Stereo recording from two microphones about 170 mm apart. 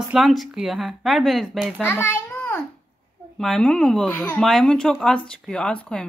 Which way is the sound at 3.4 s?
Centre (ahead or behind).